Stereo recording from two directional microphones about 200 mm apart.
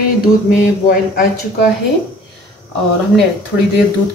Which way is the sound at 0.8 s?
50° left (ahead or behind).